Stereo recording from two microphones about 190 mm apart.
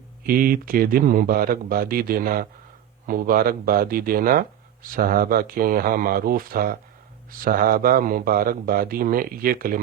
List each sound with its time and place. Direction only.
0.3 s speech: 50° right (ahead or behind)